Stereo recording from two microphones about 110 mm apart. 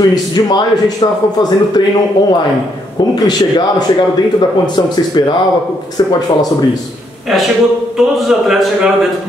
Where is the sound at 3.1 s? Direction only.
40° left (ahead or behind).